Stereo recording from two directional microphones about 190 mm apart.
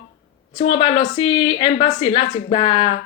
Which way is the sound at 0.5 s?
30° left (ahead or behind).